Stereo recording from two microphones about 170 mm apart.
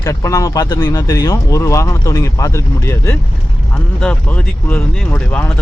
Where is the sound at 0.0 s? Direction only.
20° left (ahead or behind).